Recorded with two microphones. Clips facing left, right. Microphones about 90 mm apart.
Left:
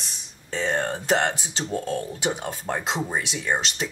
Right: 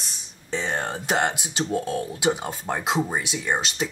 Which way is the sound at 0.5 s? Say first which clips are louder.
Left 2 dB; 15° right (ahead or behind).